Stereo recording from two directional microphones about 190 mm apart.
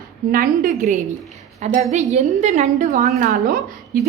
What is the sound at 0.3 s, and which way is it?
A woman's voice, 45° right (ahead or behind).